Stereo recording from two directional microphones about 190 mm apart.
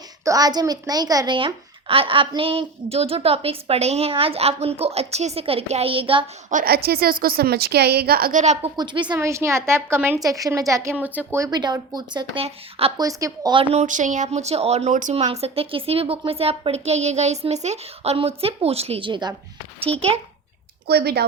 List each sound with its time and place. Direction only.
0.3 s a child's voice: 20° right (ahead or behind)
6.5 s a woman's voice: 50° right (ahead or behind)
8.7 s a child's voice: 25° right (ahead or behind)
13.0 s speech: 20° right (ahead or behind)
20.8 s speech: 55° right (ahead or behind)